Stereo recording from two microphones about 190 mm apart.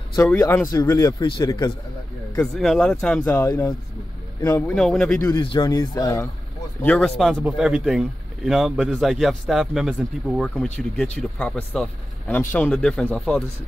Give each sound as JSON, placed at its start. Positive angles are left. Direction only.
{"t": 0.3, "sound": "speech", "side_deg": 10}
{"t": 2.3, "sound": "speech", "side_deg": 0}
{"t": 3.3, "sound": "speech", "side_deg": 15}
{"t": 5.3, "sound": "speech", "side_deg": 25}
{"t": 6.8, "sound": "speech", "side_deg": 5}